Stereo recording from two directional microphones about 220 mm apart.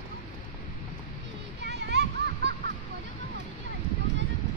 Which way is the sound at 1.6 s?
50° right (ahead or behind).